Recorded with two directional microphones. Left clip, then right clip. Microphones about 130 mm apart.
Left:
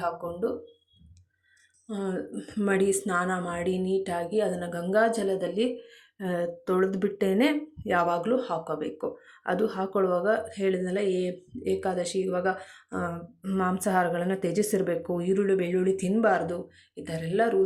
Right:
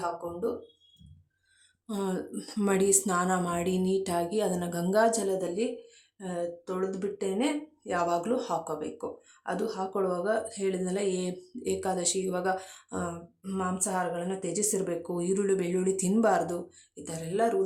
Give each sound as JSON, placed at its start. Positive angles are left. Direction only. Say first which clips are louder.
{"t": 0.2, "sound": "speech", "louder": "left 3 dB", "side_deg": 15}
{"t": 2.0, "sound": "speech", "louder": "left 1 dB", "side_deg": -10}
{"t": 6.1, "sound": "speech", "louder": "left 4 dB", "side_deg": 25}
{"t": 7.9, "sound": "speech", "louder": "left 3 dB", "side_deg": 15}
{"t": 8.3, "sound": "speech", "louder": "left 2 dB", "side_deg": 0}
{"t": 8.7, "sound": "speech", "louder": "left 4 dB", "side_deg": 10}
{"t": 13.0, "sound": "speech", "louder": "left 3 dB", "side_deg": 10}